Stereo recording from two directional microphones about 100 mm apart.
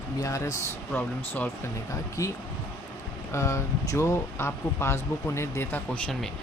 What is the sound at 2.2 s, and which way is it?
Speech, 35° left (ahead or behind).